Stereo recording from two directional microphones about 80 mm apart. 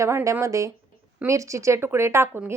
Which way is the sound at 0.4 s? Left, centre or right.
Right.